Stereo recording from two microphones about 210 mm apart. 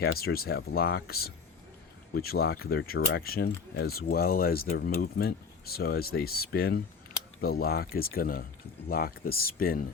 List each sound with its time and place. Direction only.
0.0 s speech: 45° left (ahead or behind)